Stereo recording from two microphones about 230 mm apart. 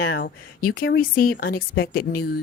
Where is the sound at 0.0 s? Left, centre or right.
Left.